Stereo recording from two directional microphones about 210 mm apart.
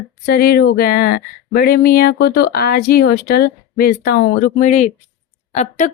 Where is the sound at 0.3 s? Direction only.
45° left (ahead or behind).